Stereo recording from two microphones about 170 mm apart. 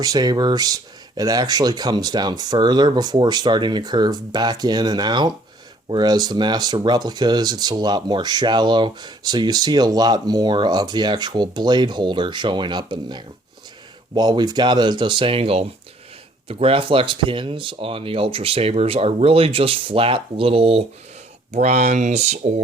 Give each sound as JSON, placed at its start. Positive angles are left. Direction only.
{"t": 0.0, "sound": "speech", "side_deg": -25}